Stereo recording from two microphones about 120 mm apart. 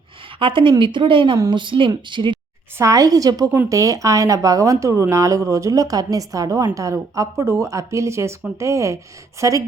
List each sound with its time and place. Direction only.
0.3 s speech: 45° right (ahead or behind)
2.7 s speech: 25° right (ahead or behind)